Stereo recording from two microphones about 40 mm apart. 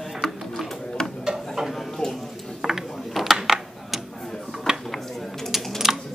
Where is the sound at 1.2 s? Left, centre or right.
Centre.